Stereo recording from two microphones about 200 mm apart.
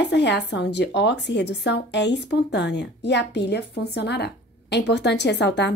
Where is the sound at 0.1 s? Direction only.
60° left (ahead or behind).